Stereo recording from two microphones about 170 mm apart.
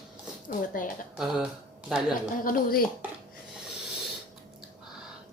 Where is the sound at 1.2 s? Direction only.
5° right (ahead or behind).